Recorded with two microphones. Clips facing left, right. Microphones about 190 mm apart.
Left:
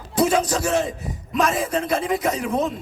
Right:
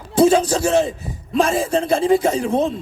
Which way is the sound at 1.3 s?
30° right (ahead or behind).